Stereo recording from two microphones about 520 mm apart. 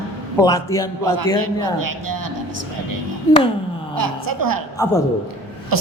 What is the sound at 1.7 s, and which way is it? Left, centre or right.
Speech, right.